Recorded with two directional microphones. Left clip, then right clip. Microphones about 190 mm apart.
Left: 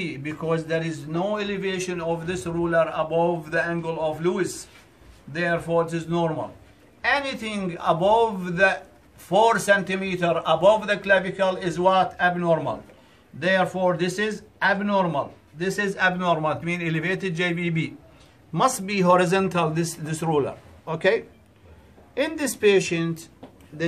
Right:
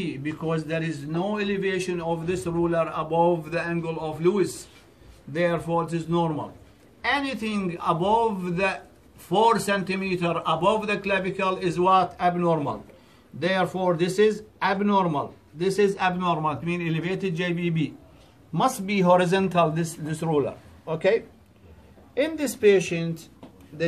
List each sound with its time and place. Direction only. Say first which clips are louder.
0.0 s a man's voice: left 1 dB; 20° left (ahead or behind); by 21.2 s 35° left (ahead or behind)
22.4 s a man's voice: even; 30° left (ahead or behind)